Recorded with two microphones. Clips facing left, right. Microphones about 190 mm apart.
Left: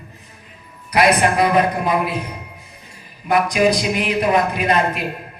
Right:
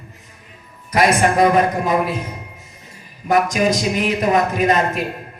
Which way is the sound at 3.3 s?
45° right (ahead or behind).